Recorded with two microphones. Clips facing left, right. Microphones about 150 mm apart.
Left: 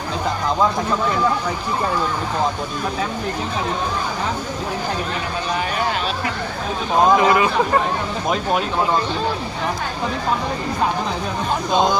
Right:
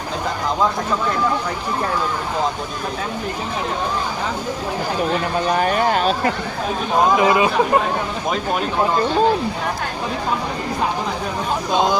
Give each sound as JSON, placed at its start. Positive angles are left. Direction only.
{"t": 5.5, "sound": "speech", "side_deg": -45}
{"t": 7.2, "sound": "speech", "side_deg": -20}